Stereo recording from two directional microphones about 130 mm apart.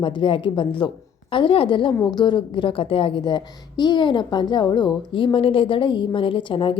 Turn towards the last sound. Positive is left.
turn(degrees=40)  # may be behind; listen again after turning